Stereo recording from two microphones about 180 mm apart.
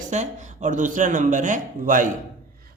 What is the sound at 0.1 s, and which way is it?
Speech, 40° right (ahead or behind).